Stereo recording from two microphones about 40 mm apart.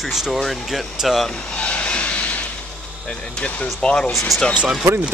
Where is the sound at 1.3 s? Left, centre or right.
Left.